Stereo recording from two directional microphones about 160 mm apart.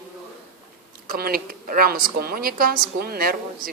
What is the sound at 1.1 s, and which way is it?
A woman's voice, 70° right (ahead or behind).